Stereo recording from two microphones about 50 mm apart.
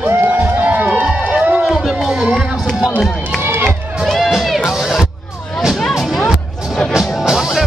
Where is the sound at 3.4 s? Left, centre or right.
Right.